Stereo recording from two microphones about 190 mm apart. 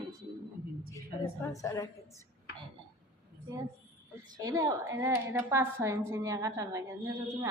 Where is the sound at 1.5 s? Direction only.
15° left (ahead or behind).